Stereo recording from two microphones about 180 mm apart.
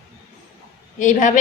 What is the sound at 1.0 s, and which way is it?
Speech, 45° left (ahead or behind).